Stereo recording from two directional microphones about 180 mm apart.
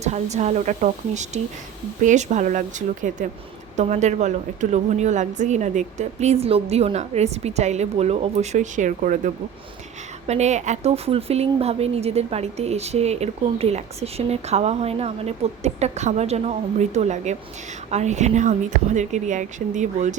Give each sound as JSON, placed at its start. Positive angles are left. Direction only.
{"t": 0.0, "sound": "a woman's voice", "side_deg": -40}